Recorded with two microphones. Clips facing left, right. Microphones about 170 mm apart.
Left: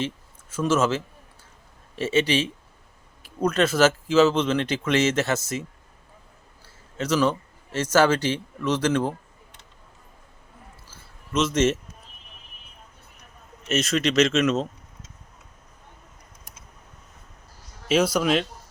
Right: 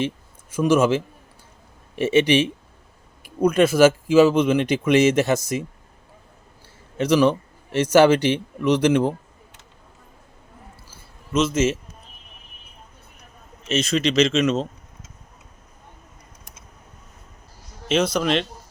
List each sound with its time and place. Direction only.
0.5 s speech: 15° right (ahead or behind)
6.9 s speech: 15° right (ahead or behind)
11.3 s speech: centre (ahead or behind)
13.7 s speech: centre (ahead or behind)
17.8 s a man's voice: 10° left (ahead or behind)